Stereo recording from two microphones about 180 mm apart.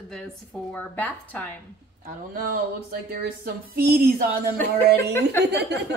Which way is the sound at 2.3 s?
55° right (ahead or behind).